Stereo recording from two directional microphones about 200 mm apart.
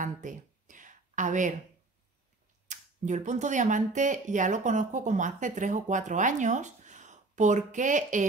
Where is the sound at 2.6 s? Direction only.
35° right (ahead or behind).